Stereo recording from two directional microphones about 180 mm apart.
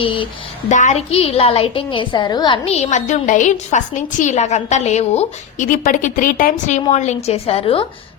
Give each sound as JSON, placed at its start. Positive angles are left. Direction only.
{"t": 0.7, "sound": "a woman's voice", "side_deg": 40}